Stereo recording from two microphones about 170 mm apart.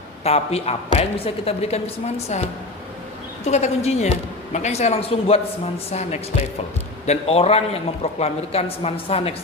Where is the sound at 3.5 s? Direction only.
40° left (ahead or behind).